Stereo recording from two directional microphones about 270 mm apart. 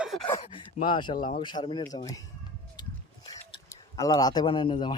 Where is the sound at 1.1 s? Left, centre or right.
Left.